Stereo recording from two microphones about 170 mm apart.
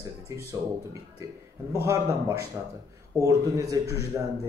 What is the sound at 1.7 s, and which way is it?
Speech, 15° right (ahead or behind).